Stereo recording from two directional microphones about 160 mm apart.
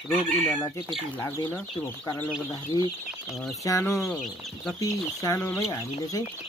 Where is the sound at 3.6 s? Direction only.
20° left (ahead or behind).